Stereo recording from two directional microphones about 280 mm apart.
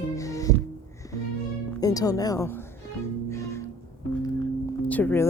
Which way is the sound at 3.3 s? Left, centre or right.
Centre.